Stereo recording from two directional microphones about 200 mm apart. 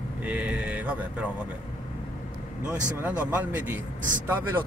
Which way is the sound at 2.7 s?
5° right (ahead or behind).